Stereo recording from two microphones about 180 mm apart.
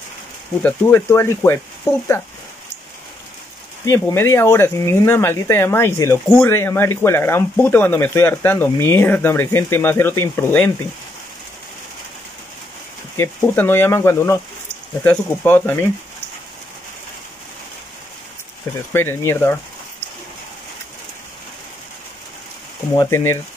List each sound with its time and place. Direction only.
0.6 s speech: 10° left (ahead or behind)
3.8 s speech: 15° left (ahead or behind)
13.2 s speech: 15° left (ahead or behind)
18.9 s speech: 15° left (ahead or behind)
22.9 s speech: 15° left (ahead or behind)